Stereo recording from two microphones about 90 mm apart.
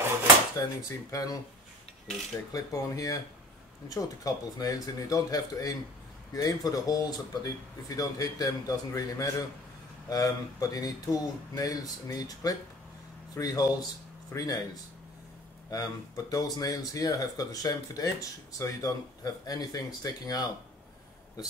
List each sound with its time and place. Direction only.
0.6 s speech: 40° left (ahead or behind)
2.5 s speech: 40° left (ahead or behind)
15.7 s speech: 40° left (ahead or behind)